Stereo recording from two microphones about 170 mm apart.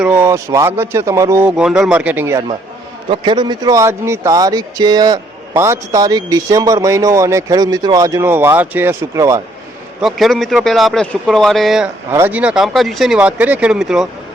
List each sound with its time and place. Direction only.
0.0 s speech: 10° right (ahead or behind)
3.1 s speech: 25° right (ahead or behind)
10.0 s speech: centre (ahead or behind)
12.1 s speech: 10° right (ahead or behind)